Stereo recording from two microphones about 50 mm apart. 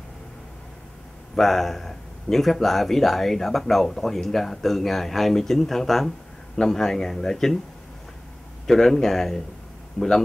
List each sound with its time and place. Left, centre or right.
1.3 s speech: centre
8.6 s speech: centre